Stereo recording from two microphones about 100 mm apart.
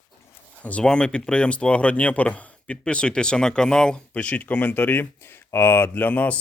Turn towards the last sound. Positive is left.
turn(degrees=15)  # may be behind; listen again after turning